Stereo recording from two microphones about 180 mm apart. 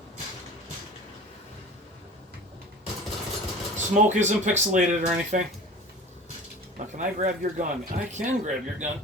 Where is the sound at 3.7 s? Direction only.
40° right (ahead or behind).